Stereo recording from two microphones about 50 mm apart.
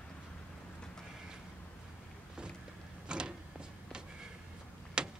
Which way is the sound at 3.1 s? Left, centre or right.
Centre.